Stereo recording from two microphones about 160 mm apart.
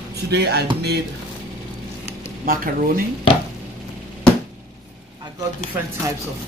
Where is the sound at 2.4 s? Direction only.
65° right (ahead or behind).